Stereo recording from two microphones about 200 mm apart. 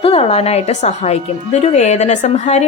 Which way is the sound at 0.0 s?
30° left (ahead or behind).